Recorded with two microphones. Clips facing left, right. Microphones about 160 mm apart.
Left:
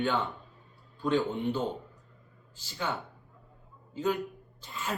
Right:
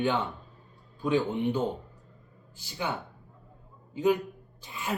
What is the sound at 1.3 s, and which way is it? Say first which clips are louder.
A man's voice: right 3 dB; 20° right (ahead or behind).